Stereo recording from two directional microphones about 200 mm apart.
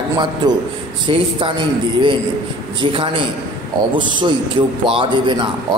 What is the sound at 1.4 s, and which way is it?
A man's voice, 25° right (ahead or behind).